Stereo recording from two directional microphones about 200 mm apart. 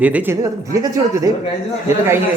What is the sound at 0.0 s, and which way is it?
Speech, 10° right (ahead or behind).